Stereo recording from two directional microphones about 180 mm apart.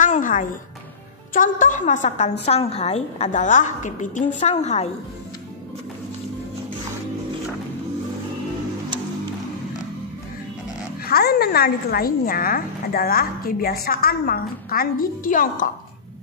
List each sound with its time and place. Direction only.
0.0 s a sound: 45° left (ahead or behind)
1.3 s a woman's voice: 45° left (ahead or behind)
11.1 s a woman's voice: 60° left (ahead or behind)